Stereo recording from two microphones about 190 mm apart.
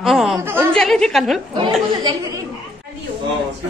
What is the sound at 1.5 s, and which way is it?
Speech, 25° right (ahead or behind).